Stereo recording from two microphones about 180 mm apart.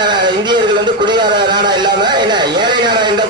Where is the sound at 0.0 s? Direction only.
25° right (ahead or behind).